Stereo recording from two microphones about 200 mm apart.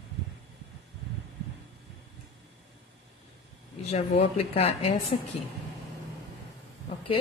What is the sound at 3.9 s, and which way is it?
Speech, 30° left (ahead or behind).